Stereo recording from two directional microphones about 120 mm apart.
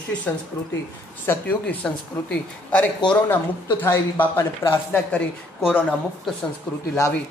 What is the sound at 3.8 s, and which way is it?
Speech, 20° left (ahead or behind).